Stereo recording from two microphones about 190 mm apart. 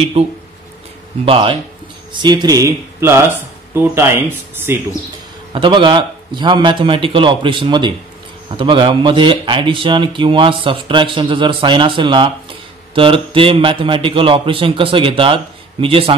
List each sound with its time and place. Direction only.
1.2 s a man's voice: 30° right (ahead or behind); by 4.7 s 10° right (ahead or behind)
5.5 s a man's voice: 25° right (ahead or behind)